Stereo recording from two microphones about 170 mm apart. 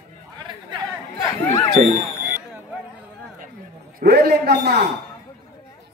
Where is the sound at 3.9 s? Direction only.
70° right (ahead or behind).